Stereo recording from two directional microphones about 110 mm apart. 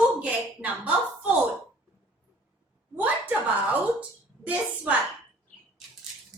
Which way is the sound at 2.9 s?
15° right (ahead or behind).